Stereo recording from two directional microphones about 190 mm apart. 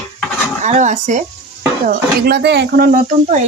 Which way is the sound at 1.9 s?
55° right (ahead or behind).